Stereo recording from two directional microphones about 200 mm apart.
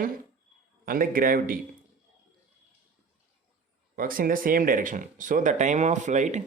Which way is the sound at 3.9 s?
45° right (ahead or behind).